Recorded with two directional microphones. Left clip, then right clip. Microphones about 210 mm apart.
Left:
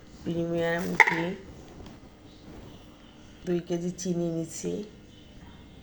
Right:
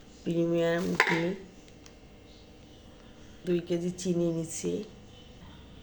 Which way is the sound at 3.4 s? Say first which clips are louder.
Even; 5° right (ahead or behind).